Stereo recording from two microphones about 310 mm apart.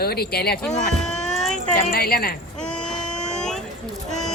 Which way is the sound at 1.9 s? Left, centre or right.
Left.